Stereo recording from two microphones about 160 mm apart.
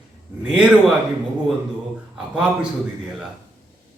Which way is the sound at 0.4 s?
5° right (ahead or behind).